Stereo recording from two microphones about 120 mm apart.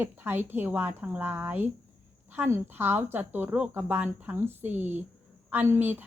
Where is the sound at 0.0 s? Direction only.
15° right (ahead or behind).